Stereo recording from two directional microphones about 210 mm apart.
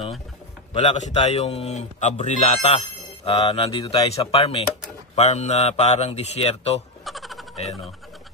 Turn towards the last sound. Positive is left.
turn(degrees=0)  # may be behind; listen again after turning